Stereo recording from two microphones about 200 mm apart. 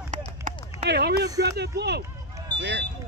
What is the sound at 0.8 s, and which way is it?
Speech, 55° right (ahead or behind).